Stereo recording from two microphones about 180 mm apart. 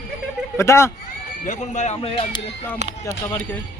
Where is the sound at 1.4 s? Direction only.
40° left (ahead or behind).